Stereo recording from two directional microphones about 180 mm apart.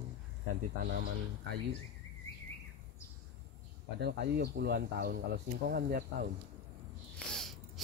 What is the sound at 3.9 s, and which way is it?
Speech, 65° right (ahead or behind).